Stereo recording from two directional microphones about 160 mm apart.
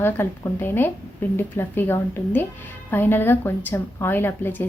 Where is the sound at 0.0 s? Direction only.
15° left (ahead or behind).